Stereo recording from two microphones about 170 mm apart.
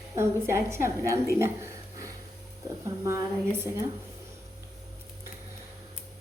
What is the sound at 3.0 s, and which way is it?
Speech, 15° right (ahead or behind).